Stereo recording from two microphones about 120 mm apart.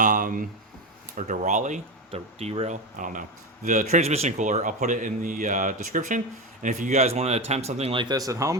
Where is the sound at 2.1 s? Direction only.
60° right (ahead or behind); by 6.2 s 90° right.